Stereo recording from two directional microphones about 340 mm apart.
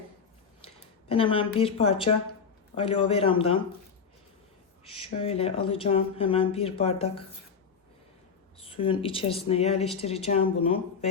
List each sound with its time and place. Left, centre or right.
1.0 s speech: centre
4.9 s speech: centre
8.6 s speech: centre